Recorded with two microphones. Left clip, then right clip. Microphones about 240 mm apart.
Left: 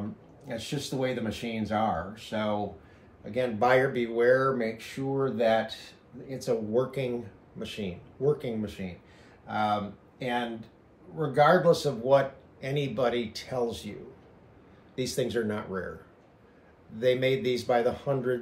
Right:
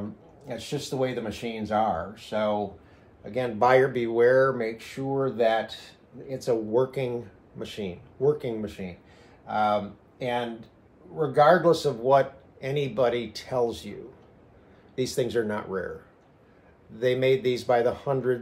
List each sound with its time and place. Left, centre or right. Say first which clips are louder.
0.5 s speech: right 2 dB; right
15.0 s speech: right 3 dB; right
17.0 s speech: right 2 dB; right